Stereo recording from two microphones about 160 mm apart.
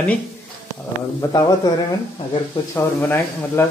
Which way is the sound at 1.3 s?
25° left (ahead or behind).